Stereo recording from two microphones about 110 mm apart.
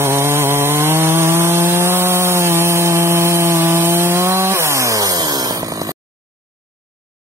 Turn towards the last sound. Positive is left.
turn(degrees=-35)  # may be behind; listen again after turning